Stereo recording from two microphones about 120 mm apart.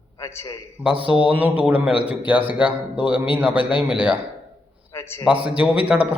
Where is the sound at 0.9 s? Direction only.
50° left (ahead or behind).